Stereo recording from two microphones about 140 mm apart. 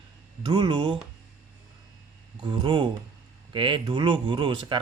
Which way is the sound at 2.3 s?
30° right (ahead or behind).